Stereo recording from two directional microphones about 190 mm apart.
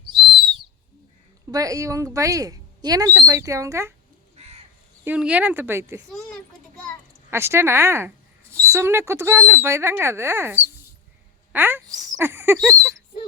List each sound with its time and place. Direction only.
1.5 s speech: 20° right (ahead or behind)
4.4 s crow: 35° right (ahead or behind)
5.0 s speech: 5° right (ahead or behind)
7.3 s speech: 15° right (ahead or behind)
11.5 s a sound: 10° right (ahead or behind)